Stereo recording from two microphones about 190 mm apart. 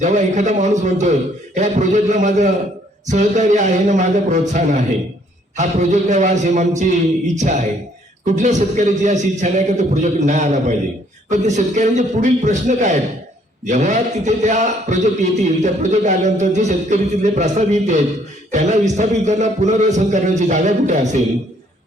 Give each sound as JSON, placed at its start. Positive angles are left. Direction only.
{"t": 0.0, "sound": "a man's voice", "side_deg": -40}